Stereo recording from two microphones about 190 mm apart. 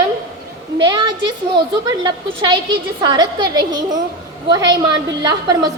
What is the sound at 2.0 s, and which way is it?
A woman's voice, 25° right (ahead or behind).